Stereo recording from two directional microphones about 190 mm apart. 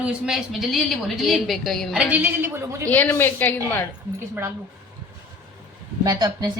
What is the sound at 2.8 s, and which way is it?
Speech, 10° left (ahead or behind).